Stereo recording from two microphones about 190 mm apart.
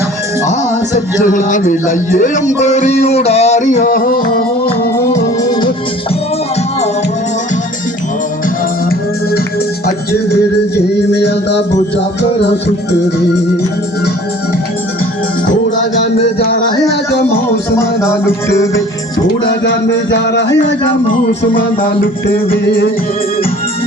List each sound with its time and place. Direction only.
0.9 s speech: 45° left (ahead or behind)
2.6 s music: 35° left (ahead or behind)
4.6 s music: 15° left (ahead or behind)
11.1 s music: 65° left (ahead or behind)
16.9 s music: 60° left (ahead or behind)
17.7 s music: 15° left (ahead or behind)
19.5 s music: 65° left (ahead or behind)
21.5 s speech: 50° left (ahead or behind)